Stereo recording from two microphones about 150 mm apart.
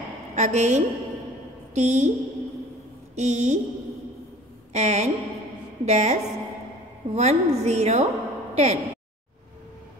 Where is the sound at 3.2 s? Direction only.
50° right (ahead or behind).